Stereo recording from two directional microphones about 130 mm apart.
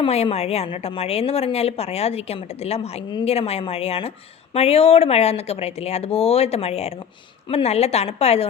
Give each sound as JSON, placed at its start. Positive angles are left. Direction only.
{"t": 0.1, "sound": "a woman's voice", "side_deg": 55}